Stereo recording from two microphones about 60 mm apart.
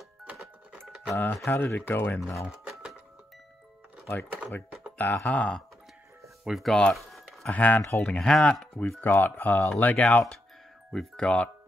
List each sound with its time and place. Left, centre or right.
1.1 s speech: left
2.4 s speech: centre
4.9 s speech: left
6.4 s speech: centre
7.5 s speech: left
8.2 s speech: centre
9.0 s speech: left
11.1 s speech: centre